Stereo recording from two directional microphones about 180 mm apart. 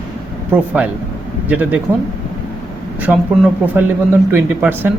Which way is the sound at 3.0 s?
5° right (ahead or behind).